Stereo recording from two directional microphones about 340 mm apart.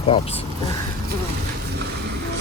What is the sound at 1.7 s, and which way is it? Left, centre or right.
Vehicle, right.